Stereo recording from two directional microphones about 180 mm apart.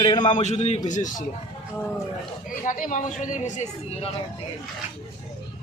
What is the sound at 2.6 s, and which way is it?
Speech, 45° left (ahead or behind).